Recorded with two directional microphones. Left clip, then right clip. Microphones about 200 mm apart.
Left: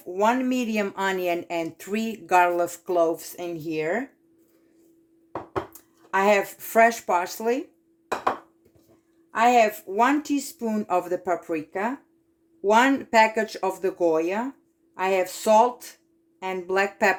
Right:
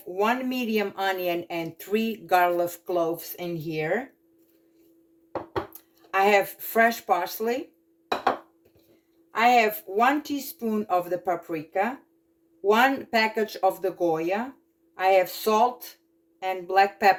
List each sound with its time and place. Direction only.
0.1 s speech: 40° left (ahead or behind)
5.7 s speech: 40° left (ahead or behind)
9.3 s speech: 45° left (ahead or behind)